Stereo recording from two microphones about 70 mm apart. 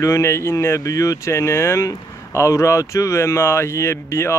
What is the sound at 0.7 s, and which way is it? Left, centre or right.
Speech, left.